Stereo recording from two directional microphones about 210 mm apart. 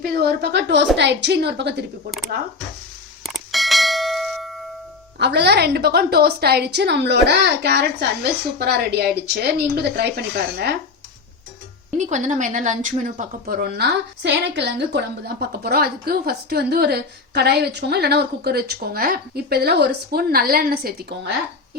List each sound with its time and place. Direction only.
0.1 s a woman's voice: 50° right (ahead or behind)
3.2 s bell: centre (ahead or behind)
5.2 s speech: 55° right (ahead or behind)
11.9 s speech: 35° right (ahead or behind)